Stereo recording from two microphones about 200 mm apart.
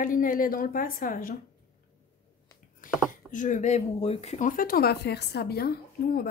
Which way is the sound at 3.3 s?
40° left (ahead or behind).